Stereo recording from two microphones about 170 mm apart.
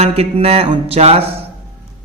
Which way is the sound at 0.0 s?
35° right (ahead or behind).